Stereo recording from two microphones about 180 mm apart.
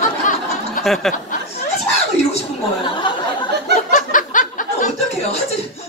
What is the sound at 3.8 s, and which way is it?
Chuckle, 45° left (ahead or behind).